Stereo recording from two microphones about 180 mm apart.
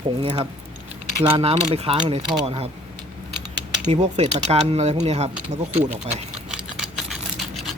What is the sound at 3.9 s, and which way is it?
Speech, 35° right (ahead or behind).